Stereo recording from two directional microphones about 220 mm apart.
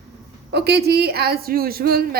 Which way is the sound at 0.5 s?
50° right (ahead or behind).